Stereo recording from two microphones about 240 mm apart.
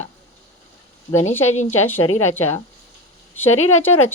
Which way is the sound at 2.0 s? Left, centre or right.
Left.